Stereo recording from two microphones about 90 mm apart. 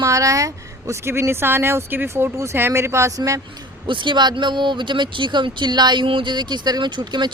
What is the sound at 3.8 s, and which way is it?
A woman's voice, 65° right (ahead or behind).